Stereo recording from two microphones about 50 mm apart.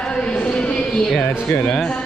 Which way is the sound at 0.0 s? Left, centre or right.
Centre.